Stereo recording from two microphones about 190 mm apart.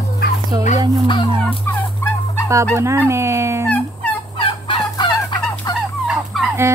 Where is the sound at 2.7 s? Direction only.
15° right (ahead or behind).